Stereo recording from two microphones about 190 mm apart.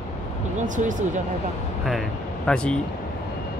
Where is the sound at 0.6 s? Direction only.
40° right (ahead or behind).